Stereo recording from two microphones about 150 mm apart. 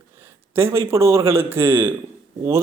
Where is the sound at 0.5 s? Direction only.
15° right (ahead or behind).